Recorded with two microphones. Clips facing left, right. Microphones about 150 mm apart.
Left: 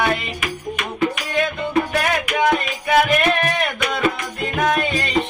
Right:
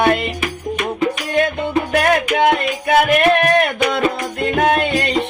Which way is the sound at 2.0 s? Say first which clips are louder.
Right 5 dB; 55° right (ahead or behind).